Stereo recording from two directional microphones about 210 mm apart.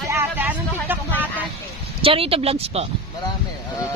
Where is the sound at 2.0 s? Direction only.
25° right (ahead or behind).